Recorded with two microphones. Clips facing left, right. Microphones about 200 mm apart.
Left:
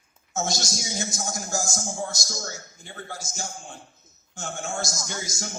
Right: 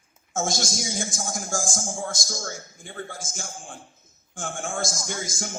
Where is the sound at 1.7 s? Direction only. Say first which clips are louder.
Even; 50° right (ahead or behind).